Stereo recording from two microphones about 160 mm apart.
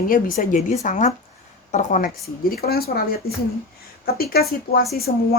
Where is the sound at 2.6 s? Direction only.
75° left (ahead or behind).